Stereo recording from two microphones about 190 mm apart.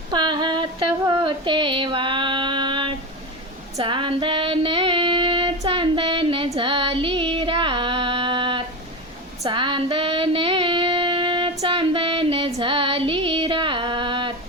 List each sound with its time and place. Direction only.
0.1 s a sound: 25° right (ahead or behind)
3.8 s female singing: 25° right (ahead or behind)
11.6 s music: 30° right (ahead or behind)
12.5 s female singing: 30° right (ahead or behind)